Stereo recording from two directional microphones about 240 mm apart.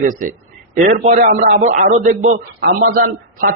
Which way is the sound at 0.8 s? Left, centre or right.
Right.